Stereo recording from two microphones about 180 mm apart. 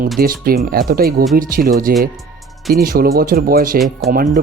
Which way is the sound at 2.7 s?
55° right (ahead or behind).